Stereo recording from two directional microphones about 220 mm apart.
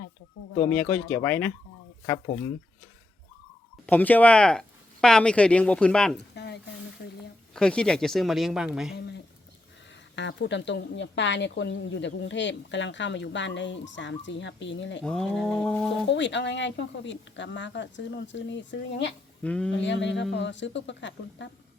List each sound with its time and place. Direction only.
0.6 s speech: 5° left (ahead or behind)
3.8 s speech: 10° left (ahead or behind)
6.1 s a sound: 50° left (ahead or behind)
7.5 s speech: 5° left (ahead or behind)
9.0 s a sound: 50° left (ahead or behind)
10.2 s a woman's voice: 55° left (ahead or behind)
15.0 s speech: 5° left (ahead or behind)
16.0 s a woman's voice: 55° left (ahead or behind)
19.4 s speech: 5° left (ahead or behind)
19.7 s a woman's voice: 55° left (ahead or behind)